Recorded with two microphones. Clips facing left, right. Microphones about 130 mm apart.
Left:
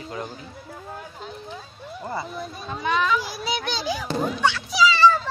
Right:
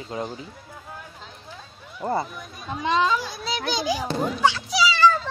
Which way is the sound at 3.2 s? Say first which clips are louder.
Left 2 dB; 5° left (ahead or behind).